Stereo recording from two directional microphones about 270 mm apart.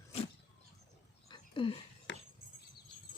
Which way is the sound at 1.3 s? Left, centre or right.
Centre.